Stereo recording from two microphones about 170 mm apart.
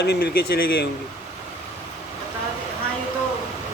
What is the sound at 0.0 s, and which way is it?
Speech, 75° left (ahead or behind).